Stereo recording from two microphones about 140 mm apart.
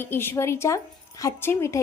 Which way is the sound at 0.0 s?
15° left (ahead or behind).